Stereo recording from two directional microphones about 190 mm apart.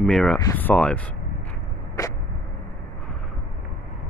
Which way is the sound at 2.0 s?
20° left (ahead or behind).